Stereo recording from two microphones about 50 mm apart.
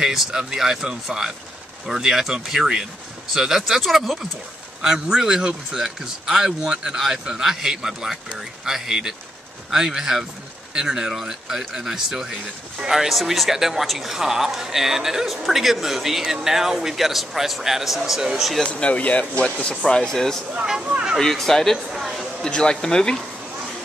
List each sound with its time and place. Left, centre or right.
0.0 s a man's voice: centre
18.7 s speech: left
19.8 s speech: centre
20.6 s a man's voice: centre
21.2 s speech: centre
22.4 s speech: centre